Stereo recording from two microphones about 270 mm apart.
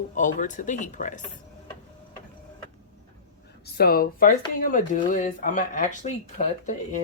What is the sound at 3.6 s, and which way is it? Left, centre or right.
Speech, left.